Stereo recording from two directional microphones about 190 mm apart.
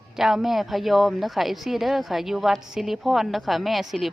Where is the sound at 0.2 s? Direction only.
Centre (ahead or behind).